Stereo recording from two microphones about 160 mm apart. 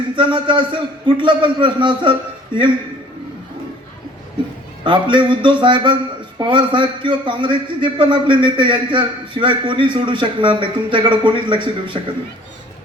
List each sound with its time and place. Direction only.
0.2 s a man's voice: 30° right (ahead or behind)
4.8 s a man's voice: 30° right (ahead or behind)